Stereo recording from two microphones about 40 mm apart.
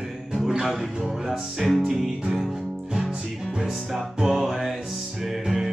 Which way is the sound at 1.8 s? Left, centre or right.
Centre.